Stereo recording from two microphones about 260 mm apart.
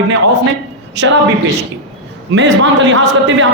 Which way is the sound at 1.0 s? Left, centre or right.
Right.